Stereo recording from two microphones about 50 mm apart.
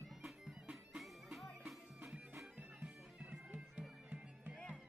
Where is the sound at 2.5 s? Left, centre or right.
Right.